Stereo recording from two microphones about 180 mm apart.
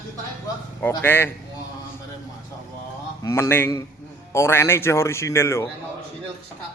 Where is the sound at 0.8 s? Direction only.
10° left (ahead or behind).